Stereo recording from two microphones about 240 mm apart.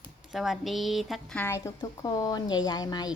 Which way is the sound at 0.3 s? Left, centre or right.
Centre.